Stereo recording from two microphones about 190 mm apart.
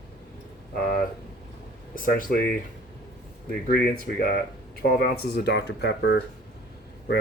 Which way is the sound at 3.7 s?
55° left (ahead or behind).